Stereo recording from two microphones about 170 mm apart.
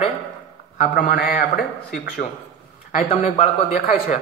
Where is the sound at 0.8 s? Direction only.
60° left (ahead or behind).